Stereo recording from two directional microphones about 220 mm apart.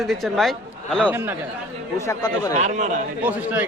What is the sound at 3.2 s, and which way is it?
Speech, 5° right (ahead or behind).